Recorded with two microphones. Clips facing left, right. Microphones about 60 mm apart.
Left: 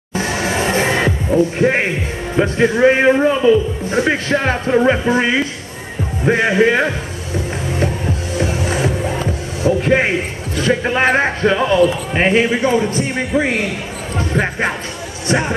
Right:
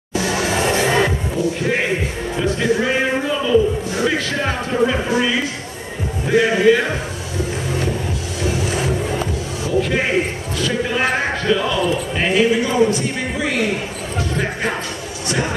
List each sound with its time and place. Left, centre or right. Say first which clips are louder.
0.1 s music: even; left
2.3 s a man's voice: left 4 dB; left
9.6 s a sound: left 5 dB; left
10.6 s a man's voice: left 4 dB; left